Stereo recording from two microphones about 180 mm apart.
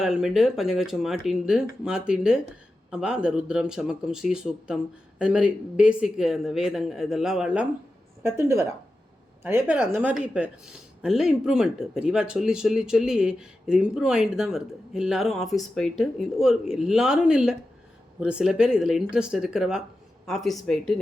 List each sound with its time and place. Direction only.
0.0 s a woman's voice: centre (ahead or behind)